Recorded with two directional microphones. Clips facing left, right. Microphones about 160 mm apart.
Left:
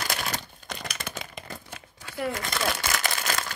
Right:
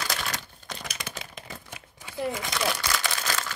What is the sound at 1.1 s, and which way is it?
Typewriter, 5° right (ahead or behind).